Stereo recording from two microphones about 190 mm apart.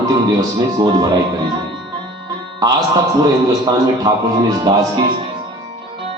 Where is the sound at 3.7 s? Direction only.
20° right (ahead or behind).